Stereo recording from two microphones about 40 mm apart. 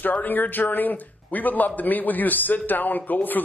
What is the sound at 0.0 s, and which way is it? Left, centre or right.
Speech, left.